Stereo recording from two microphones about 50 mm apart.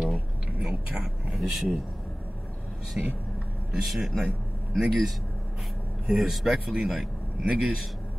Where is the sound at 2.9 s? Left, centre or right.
Centre.